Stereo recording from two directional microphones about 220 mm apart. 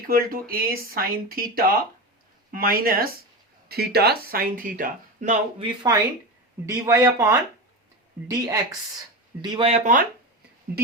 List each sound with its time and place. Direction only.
0.1 s speech: 40° right (ahead or behind)
5.6 s a man's voice: 20° right (ahead or behind)